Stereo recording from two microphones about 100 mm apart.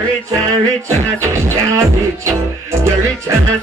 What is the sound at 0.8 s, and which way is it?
Music, 30° right (ahead or behind).